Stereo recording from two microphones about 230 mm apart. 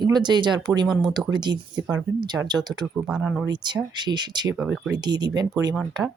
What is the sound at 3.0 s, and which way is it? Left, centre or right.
Speech, centre.